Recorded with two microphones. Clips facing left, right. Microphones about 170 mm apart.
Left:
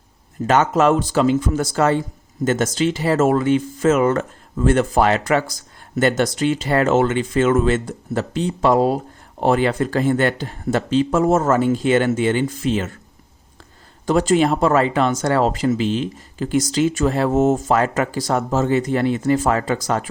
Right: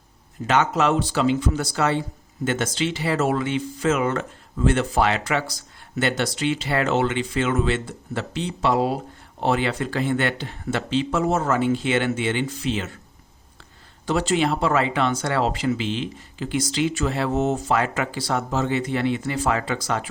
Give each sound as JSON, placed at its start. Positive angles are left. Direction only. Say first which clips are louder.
{"t": 0.4, "sound": "speech", "louder": "left 5 dB", "side_deg": 45}
{"t": 14.1, "sound": "speech", "louder": "left 5 dB", "side_deg": 45}